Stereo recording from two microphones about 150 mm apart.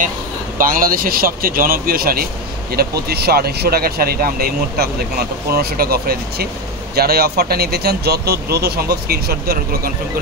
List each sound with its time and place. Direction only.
0.6 s speech: 70° right (ahead or behind); by 9.9 s 90° right